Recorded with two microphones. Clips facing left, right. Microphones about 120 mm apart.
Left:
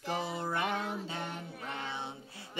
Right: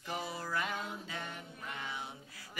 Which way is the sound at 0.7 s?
75° left (ahead or behind).